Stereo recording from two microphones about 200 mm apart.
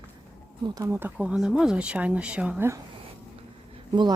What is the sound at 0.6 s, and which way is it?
Speech, 15° right (ahead or behind).